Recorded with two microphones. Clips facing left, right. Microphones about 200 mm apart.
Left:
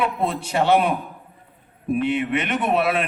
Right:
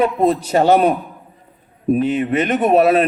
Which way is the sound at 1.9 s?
40° right (ahead or behind).